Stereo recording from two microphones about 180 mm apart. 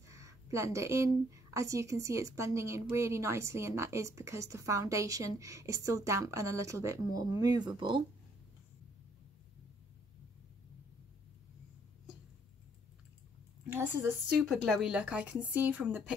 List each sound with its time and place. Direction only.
0.1 s speech: 15° right (ahead or behind)
13.7 s speech: 10° right (ahead or behind)
14.5 s speech: centre (ahead or behind)